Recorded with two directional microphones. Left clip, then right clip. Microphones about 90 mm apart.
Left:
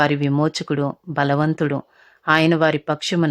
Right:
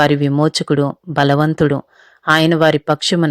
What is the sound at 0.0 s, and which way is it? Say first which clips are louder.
Speech: right 5 dB; 45° right (ahead or behind).